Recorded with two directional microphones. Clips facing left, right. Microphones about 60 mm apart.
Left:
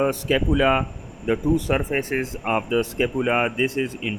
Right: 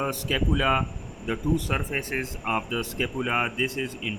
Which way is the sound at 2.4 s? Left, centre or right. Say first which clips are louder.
Left 7 dB; left.